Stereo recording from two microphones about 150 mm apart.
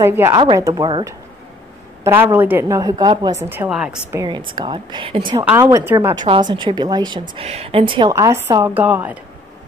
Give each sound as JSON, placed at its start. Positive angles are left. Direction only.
{"t": 0.0, "sound": "a woman's voice", "side_deg": -15}
{"t": 2.0, "sound": "a woman's voice", "side_deg": -15}
{"t": 2.8, "sound": "speech", "side_deg": -25}
{"t": 3.4, "sound": "a woman's voice", "side_deg": -15}
{"t": 4.3, "sound": "a woman's voice", "side_deg": -30}
{"t": 5.6, "sound": "speech", "side_deg": -20}
{"t": 6.1, "sound": "a woman's voice", "side_deg": -35}
{"t": 8.1, "sound": "a woman's voice", "side_deg": -20}